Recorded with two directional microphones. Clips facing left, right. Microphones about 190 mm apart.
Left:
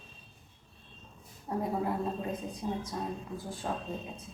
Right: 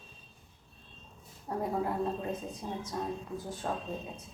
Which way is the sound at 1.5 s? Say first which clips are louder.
Left 1 dB; 10° left (ahead or behind).